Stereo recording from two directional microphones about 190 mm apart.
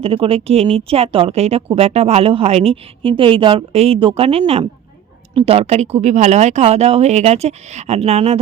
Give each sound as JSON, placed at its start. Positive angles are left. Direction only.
{"t": 0.0, "sound": "speech", "side_deg": -30}